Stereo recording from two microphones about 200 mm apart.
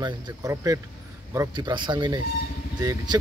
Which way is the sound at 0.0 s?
15° right (ahead or behind).